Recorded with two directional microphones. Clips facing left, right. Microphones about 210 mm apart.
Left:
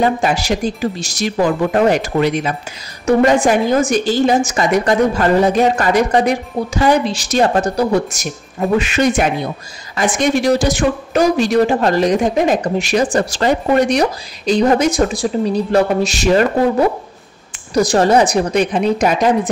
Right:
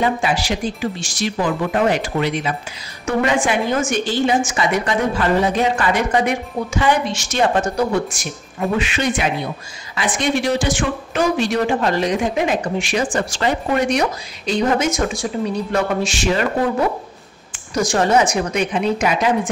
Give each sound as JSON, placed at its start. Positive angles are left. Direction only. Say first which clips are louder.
{"t": 0.0, "sound": "speech", "louder": "left 3 dB", "side_deg": 45}
{"t": 17.7, "sound": "speech", "louder": "left 4 dB", "side_deg": 35}